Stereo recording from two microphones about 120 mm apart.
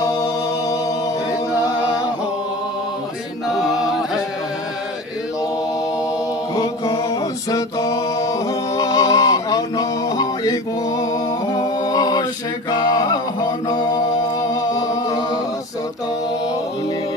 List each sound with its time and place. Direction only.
0.0 s chant: 30° left (ahead or behind)
3.4 s a sound: centre (ahead or behind)
6.5 s music: 30° left (ahead or behind)